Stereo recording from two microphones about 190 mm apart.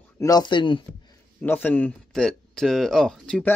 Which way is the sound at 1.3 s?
10° left (ahead or behind).